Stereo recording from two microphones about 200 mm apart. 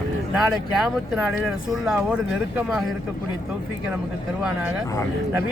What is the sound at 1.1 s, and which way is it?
Speech, centre (ahead or behind).